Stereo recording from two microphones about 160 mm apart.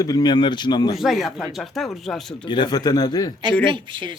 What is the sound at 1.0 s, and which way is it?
Speech, centre (ahead or behind).